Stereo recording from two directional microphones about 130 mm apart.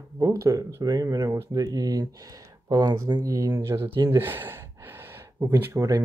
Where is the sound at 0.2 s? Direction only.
25° right (ahead or behind).